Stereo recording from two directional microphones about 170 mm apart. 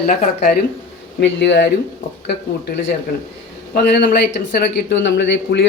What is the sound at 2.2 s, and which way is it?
Speech, 80° left.